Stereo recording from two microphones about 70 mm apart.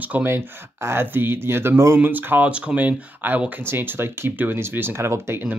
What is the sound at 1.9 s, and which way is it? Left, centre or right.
Speech, right.